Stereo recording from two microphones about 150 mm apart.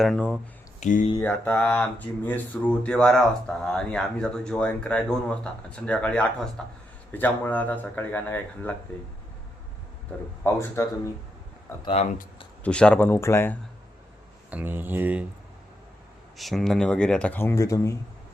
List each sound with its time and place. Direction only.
0.0 s speech: 5° left (ahead or behind)
0.8 s speech: 55° left (ahead or behind)
1.2 s speech: 10° left (ahead or behind)
10.4 s speech: 15° left (ahead or behind)
12.6 s speech: 5° left (ahead or behind)
14.5 s speech: 15° right (ahead or behind)
16.4 s speech: centre (ahead or behind); by 17.9 s 20° left (ahead or behind)